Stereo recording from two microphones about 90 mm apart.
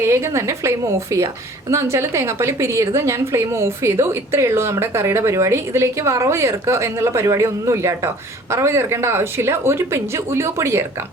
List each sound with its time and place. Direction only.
0.0 s a woman's voice: 30° right (ahead or behind)